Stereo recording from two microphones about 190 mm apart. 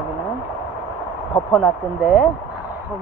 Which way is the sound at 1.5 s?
Centre (ahead or behind).